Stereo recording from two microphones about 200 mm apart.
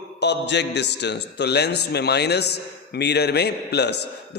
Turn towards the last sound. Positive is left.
turn(degrees=55)  # may be behind; listen again after turning